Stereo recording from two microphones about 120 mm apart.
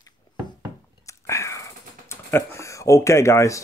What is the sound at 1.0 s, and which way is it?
Whispering, 25° left (ahead or behind).